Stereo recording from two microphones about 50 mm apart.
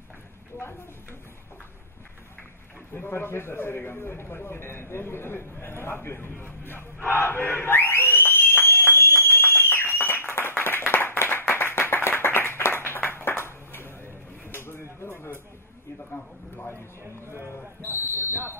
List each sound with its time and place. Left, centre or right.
2.9 s a man's voice: left
6.4 s battle cry: left
10.3 s clapping: left
14.5 s a sound: left
17.3 s speech: right
18.1 s buzzer: right